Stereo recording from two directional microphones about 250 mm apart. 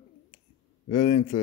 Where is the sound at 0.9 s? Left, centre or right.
Left.